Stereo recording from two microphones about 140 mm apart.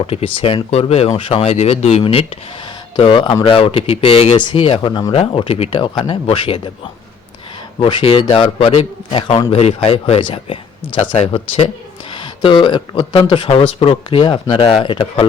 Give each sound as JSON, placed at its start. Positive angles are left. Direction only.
{"t": 0.0, "sound": "a man's voice", "side_deg": 45}
{"t": 4.9, "sound": "speech", "side_deg": 30}
{"t": 5.1, "sound": "a man's voice", "side_deg": 40}
{"t": 7.8, "sound": "a man's voice", "side_deg": 40}